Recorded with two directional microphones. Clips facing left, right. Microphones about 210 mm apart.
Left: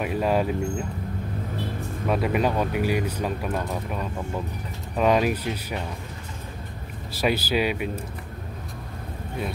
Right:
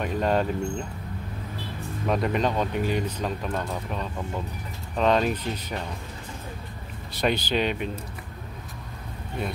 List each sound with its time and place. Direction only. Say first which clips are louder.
0.0 s speech: left 1 dB; 5° left (ahead or behind)
2.0 s speech: left 1 dB; 5° left (ahead or behind)
7.1 s speech: left 1 dB; 5° left (ahead or behind)